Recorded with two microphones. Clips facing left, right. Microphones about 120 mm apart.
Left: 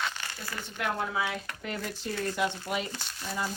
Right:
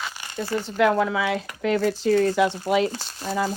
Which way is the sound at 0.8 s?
90° right.